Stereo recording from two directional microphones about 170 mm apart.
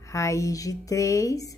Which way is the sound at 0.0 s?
20° left (ahead or behind).